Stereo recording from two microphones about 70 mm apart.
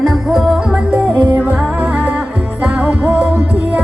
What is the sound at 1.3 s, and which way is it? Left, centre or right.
Music, right.